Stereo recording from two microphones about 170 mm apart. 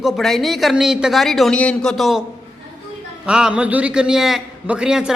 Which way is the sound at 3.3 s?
5° right (ahead or behind).